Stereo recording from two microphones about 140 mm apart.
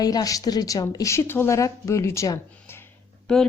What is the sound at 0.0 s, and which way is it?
A woman's voice, 25° left (ahead or behind).